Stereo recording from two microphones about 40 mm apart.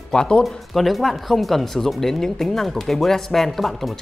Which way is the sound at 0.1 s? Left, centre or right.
Left.